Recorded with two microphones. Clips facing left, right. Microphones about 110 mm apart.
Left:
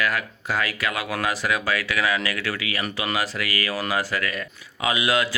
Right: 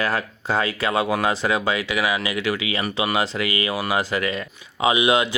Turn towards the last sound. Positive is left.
turn(degrees=-20)  # may be behind; listen again after turning